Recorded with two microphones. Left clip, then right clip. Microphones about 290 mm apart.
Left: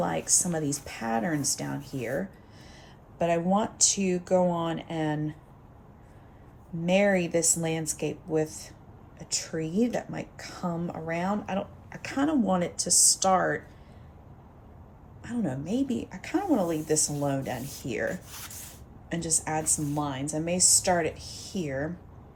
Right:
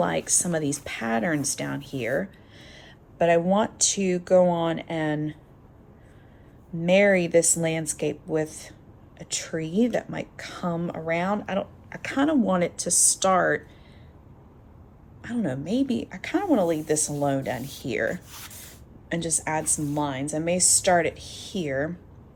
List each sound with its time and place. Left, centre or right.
0.0 s speech: centre
6.8 s speech: right
15.3 s speech: centre
18.1 s speech: centre
19.0 s speech: centre